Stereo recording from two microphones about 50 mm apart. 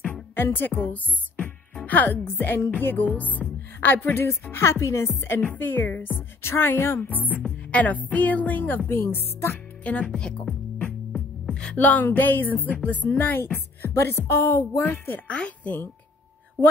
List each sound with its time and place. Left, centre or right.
0.0 s music: left
0.5 s speech: left
4.1 s speech: left
5.3 s speech: left
6.4 s speech: left
7.1 s speech: left
8.8 s speech: left
9.8 s speech: left
11.7 s speech: left
15.2 s speech: left